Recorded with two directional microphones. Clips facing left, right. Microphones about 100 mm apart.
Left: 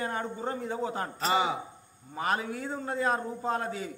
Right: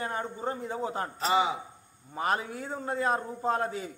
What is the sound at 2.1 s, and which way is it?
A man's voice, 30° right (ahead or behind).